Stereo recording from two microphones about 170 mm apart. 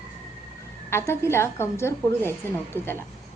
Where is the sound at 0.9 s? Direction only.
15° left (ahead or behind).